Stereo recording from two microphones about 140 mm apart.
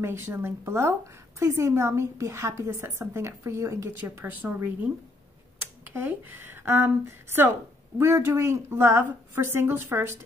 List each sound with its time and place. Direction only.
0.0 s a woman's voice: 15° right (ahead or behind)